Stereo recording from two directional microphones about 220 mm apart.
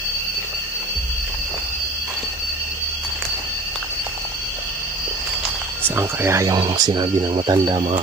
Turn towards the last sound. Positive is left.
turn(degrees=-20)  # may be behind; listen again after turning